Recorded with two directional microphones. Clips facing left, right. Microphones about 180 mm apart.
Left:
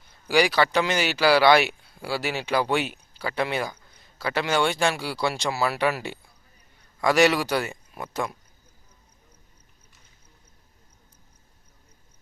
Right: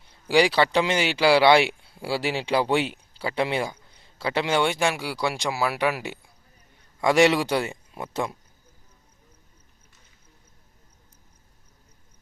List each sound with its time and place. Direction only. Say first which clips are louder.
0.3 s speech: right 1 dB; 30° right (ahead or behind)